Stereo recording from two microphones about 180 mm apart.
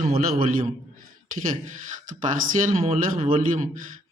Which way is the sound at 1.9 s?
45° right (ahead or behind).